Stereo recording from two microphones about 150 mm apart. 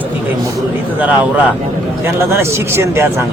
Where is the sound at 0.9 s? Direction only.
10° right (ahead or behind).